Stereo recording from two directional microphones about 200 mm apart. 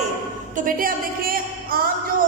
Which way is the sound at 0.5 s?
45° right (ahead or behind).